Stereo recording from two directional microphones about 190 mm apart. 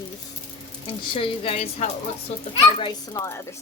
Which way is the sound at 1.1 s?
30° left (ahead or behind).